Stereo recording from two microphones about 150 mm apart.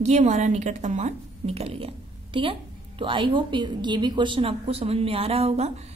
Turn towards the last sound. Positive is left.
turn(degrees=-45)  # may be behind; listen again after turning